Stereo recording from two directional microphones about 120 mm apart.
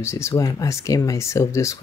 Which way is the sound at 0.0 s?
25° left (ahead or behind).